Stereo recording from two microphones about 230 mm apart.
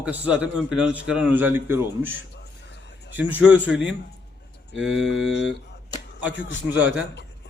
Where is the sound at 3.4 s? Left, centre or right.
Centre.